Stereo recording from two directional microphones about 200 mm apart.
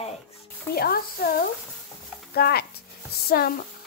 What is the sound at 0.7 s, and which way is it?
Speech, 50° left (ahead or behind).